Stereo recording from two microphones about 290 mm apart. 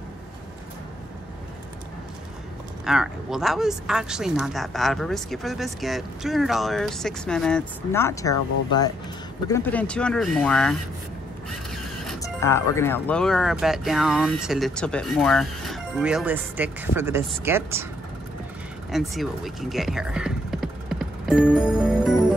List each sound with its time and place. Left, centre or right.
2.8 s speech: centre
11.7 s music: centre
12.2 s speech: centre
18.9 s speech: centre